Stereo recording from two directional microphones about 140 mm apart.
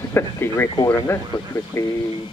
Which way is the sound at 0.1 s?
15° left (ahead or behind).